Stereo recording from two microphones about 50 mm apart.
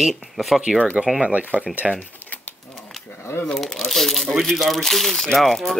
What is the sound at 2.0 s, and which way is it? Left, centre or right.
Typewriter, left.